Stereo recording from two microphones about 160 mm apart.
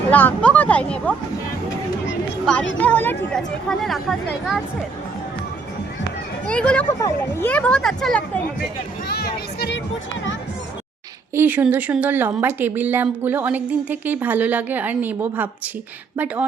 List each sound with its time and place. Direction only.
0.1 s speech: 10° left (ahead or behind)
2.5 s speech: 10° left (ahead or behind)
6.5 s speech: 5° left (ahead or behind)
9.0 s speech: 80° left
11.3 s speech: 10° right (ahead or behind)